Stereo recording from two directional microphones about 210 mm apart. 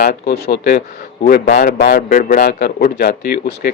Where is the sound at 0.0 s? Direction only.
45° left (ahead or behind).